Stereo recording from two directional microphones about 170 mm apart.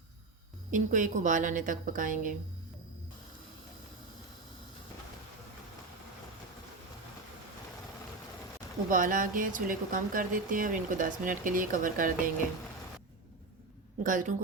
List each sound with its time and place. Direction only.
0.7 s speech: 50° right (ahead or behind)
8.9 s speech: 55° right (ahead or behind)
14.0 s speech: 50° right (ahead or behind)